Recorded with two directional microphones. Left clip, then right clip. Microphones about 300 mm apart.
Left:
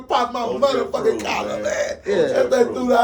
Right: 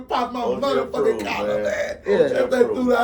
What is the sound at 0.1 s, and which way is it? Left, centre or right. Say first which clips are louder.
Speech: left 2 dB; centre.